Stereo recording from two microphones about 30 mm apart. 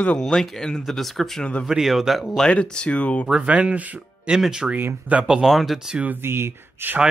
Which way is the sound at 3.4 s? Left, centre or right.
Right.